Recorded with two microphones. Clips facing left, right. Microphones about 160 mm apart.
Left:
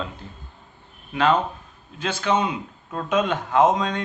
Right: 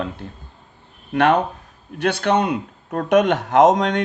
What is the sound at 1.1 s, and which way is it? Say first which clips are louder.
Speech: right 4 dB; 65° right (ahead or behind).